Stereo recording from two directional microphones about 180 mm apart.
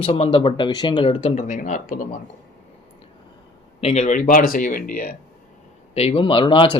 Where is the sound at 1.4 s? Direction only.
45° left (ahead or behind).